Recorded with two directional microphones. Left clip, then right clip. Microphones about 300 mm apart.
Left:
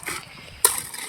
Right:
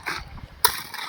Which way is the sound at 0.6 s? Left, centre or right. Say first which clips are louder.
Right 2 dB; centre.